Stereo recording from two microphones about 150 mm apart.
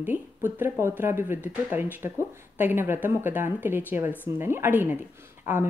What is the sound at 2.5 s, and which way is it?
Speech, 15° right (ahead or behind).